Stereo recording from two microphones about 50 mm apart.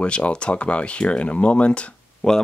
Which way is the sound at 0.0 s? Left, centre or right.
Left.